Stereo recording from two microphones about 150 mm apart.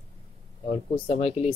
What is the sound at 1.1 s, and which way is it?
Speech, 45° left (ahead or behind).